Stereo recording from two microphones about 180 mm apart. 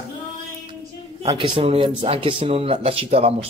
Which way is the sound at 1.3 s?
30° right (ahead or behind).